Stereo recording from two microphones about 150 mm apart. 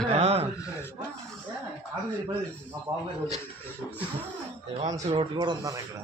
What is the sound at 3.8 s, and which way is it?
Speech, 15° left (ahead or behind).